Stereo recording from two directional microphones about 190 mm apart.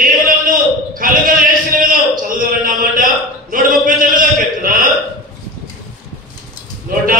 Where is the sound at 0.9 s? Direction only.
45° right (ahead or behind).